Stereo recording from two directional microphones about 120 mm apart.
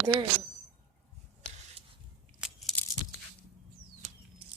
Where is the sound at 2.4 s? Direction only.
5° right (ahead or behind).